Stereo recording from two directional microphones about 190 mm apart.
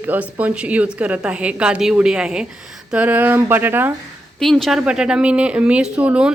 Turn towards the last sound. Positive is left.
turn(degrees=-5)  # may be behind; listen again after turning